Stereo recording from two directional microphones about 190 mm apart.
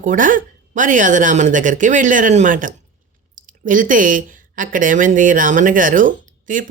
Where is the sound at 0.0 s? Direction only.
45° right (ahead or behind).